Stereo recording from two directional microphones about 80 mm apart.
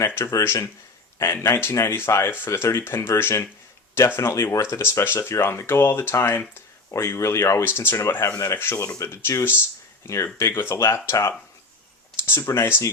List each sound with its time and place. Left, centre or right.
0.0 s speech: left
0.3 s speech: left